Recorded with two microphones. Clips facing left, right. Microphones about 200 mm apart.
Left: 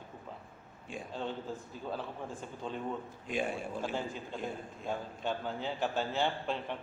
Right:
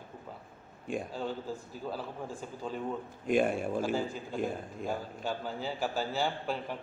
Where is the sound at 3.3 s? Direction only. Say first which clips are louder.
Right 7 dB; 50° right (ahead or behind).